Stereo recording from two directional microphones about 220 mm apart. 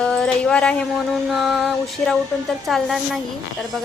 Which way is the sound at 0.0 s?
5° left (ahead or behind).